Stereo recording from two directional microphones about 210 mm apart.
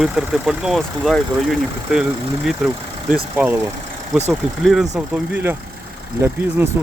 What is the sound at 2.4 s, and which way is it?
Speech, 5° right (ahead or behind).